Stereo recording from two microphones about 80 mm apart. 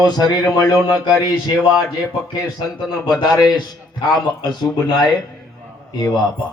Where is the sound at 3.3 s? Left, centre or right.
Left.